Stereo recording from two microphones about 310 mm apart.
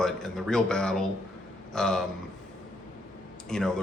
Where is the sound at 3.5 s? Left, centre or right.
Centre.